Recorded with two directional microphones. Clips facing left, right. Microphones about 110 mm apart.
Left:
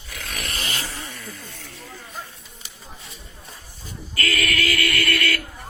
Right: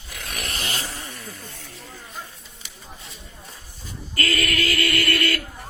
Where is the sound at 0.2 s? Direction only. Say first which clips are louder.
Even; 15° right (ahead or behind).